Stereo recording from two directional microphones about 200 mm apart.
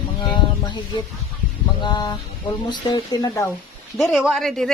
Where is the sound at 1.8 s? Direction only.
20° left (ahead or behind).